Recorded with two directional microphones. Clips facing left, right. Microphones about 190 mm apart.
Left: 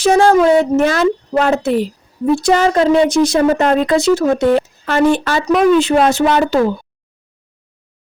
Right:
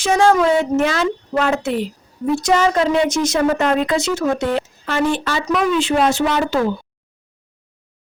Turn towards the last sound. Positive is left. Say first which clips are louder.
# left 4 dB
turn(degrees=50)  # may be behind; listen again after turning